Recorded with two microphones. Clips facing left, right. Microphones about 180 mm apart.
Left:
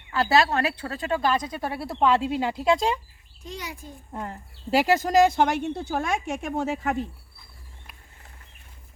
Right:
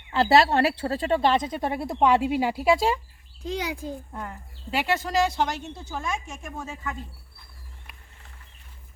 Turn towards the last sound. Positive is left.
turn(degrees=70)  # may be behind; listen again after turning